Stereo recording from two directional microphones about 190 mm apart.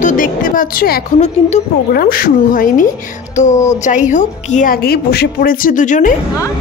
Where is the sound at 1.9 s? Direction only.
50° left (ahead or behind).